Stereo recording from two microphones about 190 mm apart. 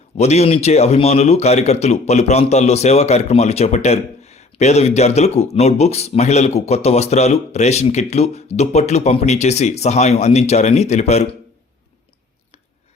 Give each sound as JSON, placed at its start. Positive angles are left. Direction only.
{"t": 0.2, "sound": "speech", "side_deg": 35}